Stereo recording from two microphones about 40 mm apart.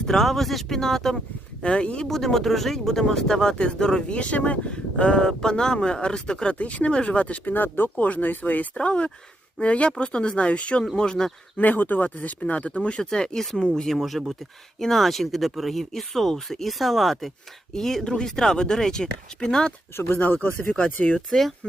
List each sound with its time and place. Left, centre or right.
0.0 s speech: centre
1.6 s speech: left
2.0 s speech: centre
4.1 s speech: left
4.7 s speech: left
6.5 s speech: left
7.4 s speech: left
8.7 s speech: left
11.5 s speech: left
13.0 s speech: centre
20.1 s speech: left
20.7 s speech: left
21.2 s speech: centre